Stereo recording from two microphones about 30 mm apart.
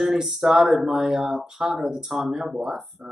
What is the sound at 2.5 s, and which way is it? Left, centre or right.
Speech, centre.